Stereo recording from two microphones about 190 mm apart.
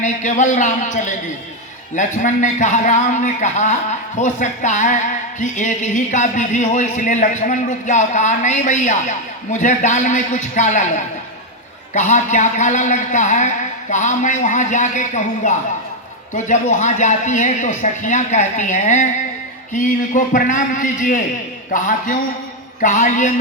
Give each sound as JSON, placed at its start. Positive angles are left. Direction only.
{"t": 0.0, "sound": "a man's voice", "side_deg": 40}